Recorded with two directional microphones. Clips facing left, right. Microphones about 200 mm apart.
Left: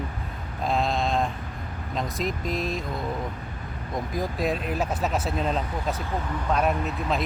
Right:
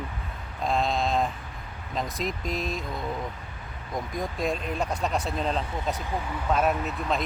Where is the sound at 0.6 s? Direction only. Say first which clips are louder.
Left 1 dB; centre (ahead or behind).